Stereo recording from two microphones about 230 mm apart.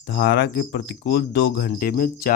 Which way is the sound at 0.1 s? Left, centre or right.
Left.